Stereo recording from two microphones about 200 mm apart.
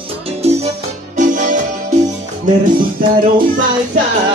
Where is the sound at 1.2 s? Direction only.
40° right (ahead or behind).